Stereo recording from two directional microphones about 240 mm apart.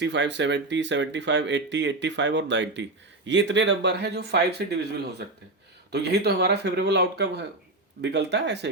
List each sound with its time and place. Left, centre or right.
0.0 s speech: right